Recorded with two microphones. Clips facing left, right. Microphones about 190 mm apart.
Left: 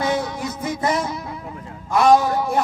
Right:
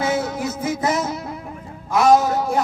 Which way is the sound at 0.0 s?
5° right (ahead or behind).